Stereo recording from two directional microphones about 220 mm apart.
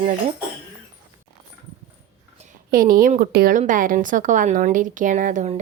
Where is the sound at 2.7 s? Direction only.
40° right (ahead or behind).